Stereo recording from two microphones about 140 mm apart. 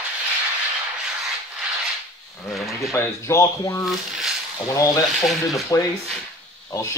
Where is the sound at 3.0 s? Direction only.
20° left (ahead or behind).